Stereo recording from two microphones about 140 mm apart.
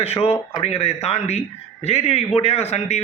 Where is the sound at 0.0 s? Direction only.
45° left (ahead or behind).